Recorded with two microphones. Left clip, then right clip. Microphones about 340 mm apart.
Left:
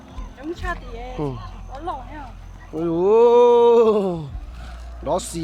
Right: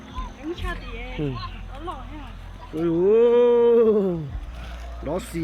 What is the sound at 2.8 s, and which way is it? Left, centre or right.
Speech, centre.